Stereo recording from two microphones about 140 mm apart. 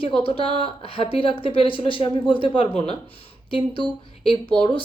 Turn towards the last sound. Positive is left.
turn(degrees=40)  # may be behind; listen again after turning